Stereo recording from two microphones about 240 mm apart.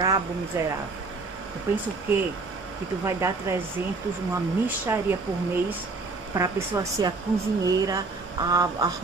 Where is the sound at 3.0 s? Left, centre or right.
Centre.